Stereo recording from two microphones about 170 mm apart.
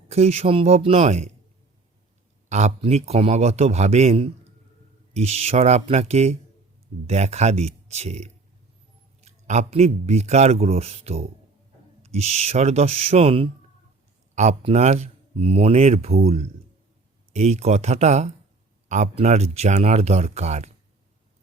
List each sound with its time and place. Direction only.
0.1 s speech: 40° right (ahead or behind)
2.5 s speech: 40° right (ahead or behind)